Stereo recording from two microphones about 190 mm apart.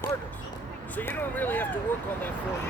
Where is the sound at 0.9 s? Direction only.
10° left (ahead or behind).